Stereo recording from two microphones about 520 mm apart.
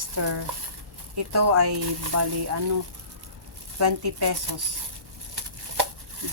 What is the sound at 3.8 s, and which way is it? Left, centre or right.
Speech, right.